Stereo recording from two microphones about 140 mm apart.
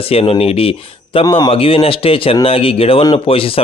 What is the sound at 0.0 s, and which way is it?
Speech, 45° left (ahead or behind).